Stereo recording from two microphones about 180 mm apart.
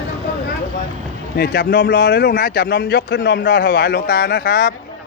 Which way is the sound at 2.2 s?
50° left (ahead or behind).